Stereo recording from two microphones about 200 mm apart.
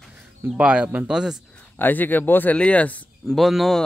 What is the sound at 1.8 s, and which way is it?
Speech, 10° left (ahead or behind).